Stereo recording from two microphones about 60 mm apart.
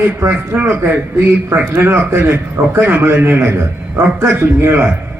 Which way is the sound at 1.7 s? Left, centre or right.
Right.